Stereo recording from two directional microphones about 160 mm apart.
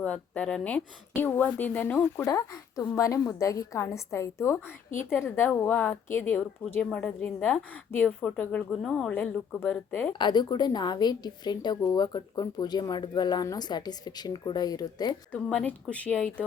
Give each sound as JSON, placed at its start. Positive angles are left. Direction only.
{"t": 0.0, "sound": "a woman's voice", "side_deg": 5}
{"t": 10.1, "sound": "a woman's voice", "side_deg": 30}
{"t": 15.3, "sound": "speech", "side_deg": 10}